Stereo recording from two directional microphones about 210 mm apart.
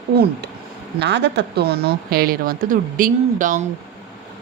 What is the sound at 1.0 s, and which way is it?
A woman's voice, 55° right (ahead or behind).